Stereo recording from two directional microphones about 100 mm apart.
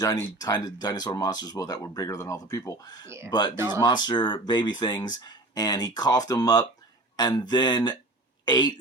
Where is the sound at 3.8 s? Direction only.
50° left (ahead or behind).